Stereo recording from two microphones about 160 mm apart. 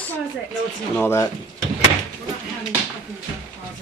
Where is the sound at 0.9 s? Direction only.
15° left (ahead or behind).